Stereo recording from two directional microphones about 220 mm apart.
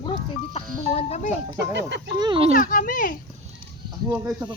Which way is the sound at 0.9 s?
30° left (ahead or behind).